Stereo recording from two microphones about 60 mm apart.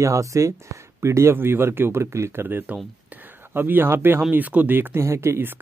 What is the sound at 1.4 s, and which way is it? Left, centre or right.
Speech, right.